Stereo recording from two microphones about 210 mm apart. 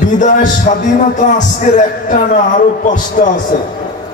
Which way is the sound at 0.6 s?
35° left (ahead or behind).